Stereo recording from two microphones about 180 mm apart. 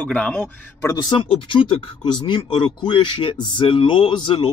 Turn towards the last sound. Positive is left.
turn(degrees=30)  # may be behind; listen again after turning